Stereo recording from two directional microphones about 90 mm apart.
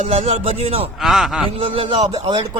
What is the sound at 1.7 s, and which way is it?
Speech, 90° right.